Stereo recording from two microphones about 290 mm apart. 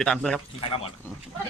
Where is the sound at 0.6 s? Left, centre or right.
Centre.